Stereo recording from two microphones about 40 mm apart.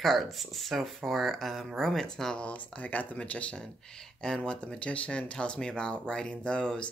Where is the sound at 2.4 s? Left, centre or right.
Left.